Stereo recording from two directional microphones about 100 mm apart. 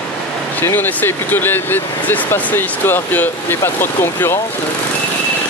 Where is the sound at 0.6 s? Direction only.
20° left (ahead or behind).